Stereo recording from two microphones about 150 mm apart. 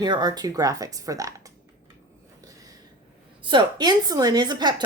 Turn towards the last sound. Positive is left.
turn(degrees=-30)  # may be behind; listen again after turning